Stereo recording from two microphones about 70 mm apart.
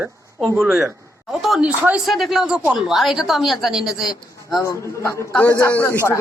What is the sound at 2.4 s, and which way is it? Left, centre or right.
A woman's voice, centre.